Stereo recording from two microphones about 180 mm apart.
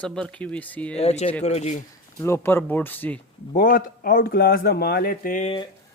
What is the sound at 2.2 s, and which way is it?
Speech, 15° left (ahead or behind).